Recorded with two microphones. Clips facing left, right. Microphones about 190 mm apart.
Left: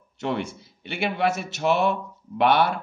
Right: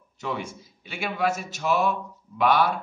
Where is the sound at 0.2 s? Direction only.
65° left (ahead or behind).